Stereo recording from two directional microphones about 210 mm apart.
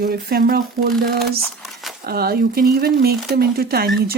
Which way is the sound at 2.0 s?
45° right (ahead or behind).